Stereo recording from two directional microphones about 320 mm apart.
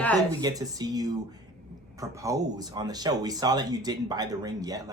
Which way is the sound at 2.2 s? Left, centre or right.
Centre.